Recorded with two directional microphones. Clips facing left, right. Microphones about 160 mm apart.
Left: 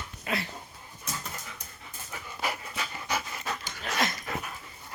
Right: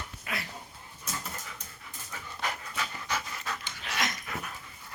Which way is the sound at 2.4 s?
10° left (ahead or behind).